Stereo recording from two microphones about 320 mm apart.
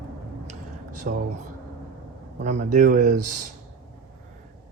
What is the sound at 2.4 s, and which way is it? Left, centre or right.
Speech, right.